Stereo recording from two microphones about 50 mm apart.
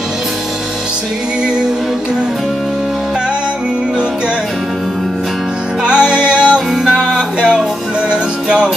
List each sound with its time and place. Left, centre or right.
5.9 s music: centre